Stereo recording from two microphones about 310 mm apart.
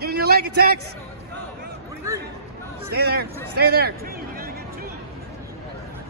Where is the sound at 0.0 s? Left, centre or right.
Right.